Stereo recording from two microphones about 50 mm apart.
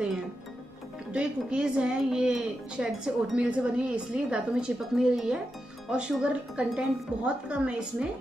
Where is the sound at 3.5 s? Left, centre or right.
Right.